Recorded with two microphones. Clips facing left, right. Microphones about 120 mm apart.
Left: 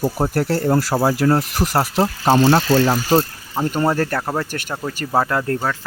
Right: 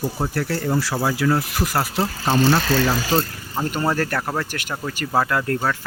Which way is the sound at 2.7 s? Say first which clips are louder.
Left 4 dB; 25° left (ahead or behind).